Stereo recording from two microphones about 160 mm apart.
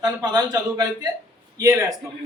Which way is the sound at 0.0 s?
25° right (ahead or behind).